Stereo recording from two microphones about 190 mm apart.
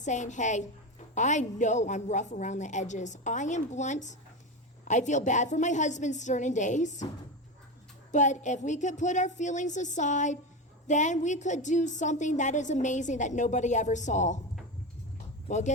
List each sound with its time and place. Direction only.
0.0 s a woman's voice: 40° left (ahead or behind)
8.1 s a woman's voice: 40° left (ahead or behind)
15.4 s speech: 40° left (ahead or behind)